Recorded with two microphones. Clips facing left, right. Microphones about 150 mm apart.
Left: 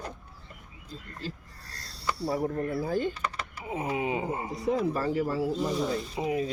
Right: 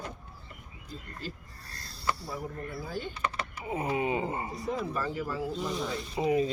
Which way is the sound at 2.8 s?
45° left (ahead or behind).